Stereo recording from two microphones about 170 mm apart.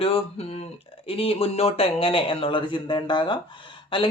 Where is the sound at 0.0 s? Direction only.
35° left (ahead or behind).